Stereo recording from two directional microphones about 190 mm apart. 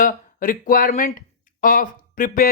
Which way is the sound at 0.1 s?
45° left (ahead or behind).